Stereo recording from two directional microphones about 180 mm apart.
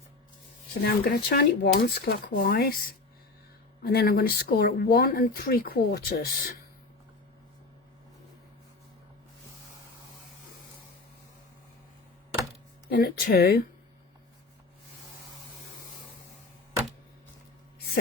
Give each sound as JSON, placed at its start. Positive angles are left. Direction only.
{"t": 0.8, "sound": "speech", "side_deg": 60}
{"t": 3.8, "sound": "speech", "side_deg": 60}
{"t": 12.9, "sound": "speech", "side_deg": 55}